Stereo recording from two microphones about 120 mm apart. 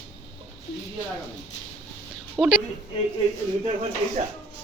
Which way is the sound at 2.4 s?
Centre (ahead or behind).